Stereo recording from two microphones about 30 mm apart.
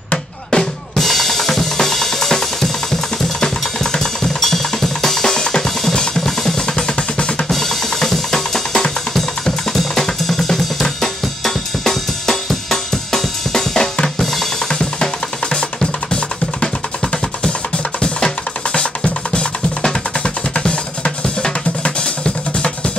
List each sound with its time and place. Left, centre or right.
0.5 s drum: left
1.0 s drum kit: centre
5.9 s drum: centre
8.3 s drum kit: centre
15.5 s drum: left
18.0 s drum: left
20.5 s drum: left